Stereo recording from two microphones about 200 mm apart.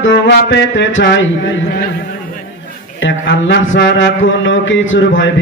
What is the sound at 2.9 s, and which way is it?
Music, 65° left (ahead or behind).